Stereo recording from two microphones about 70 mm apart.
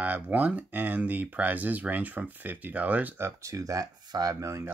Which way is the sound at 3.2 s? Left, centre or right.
Right.